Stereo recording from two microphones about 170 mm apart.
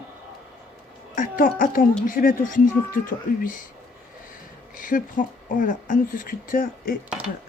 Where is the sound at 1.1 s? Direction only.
55° left (ahead or behind).